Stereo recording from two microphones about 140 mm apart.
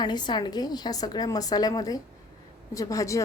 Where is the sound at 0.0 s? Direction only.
30° left (ahead or behind).